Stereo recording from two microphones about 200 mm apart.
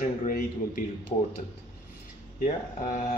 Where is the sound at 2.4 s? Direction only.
40° left (ahead or behind).